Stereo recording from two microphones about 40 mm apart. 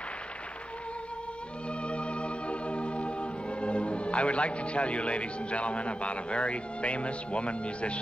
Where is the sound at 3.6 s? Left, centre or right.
Left.